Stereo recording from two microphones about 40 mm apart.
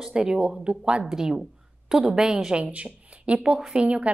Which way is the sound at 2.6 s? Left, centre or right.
Right.